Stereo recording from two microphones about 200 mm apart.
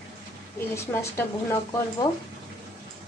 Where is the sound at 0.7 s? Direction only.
15° left (ahead or behind).